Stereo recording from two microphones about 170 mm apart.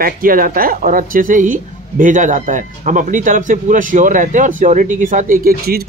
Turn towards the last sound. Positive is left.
turn(degrees=-60)  # may be behind; listen again after turning